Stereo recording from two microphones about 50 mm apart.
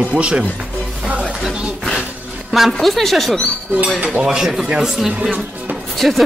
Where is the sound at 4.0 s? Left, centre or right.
Right.